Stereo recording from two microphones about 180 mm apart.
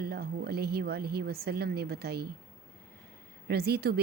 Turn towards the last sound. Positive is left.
turn(degrees=-60)  # may be behind; listen again after turning